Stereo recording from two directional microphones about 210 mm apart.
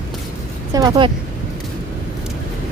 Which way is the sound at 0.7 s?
15° right (ahead or behind).